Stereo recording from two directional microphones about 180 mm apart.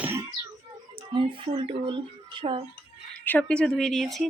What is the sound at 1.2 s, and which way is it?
Speech, 30° right (ahead or behind).